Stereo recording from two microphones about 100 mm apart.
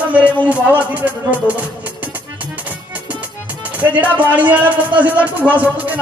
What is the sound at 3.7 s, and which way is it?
Music, 15° right (ahead or behind).